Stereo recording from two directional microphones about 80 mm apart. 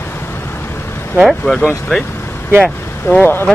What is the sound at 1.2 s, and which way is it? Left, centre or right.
Speech, centre.